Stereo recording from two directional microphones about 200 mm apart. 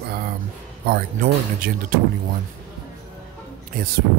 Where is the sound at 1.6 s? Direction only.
45° right (ahead or behind).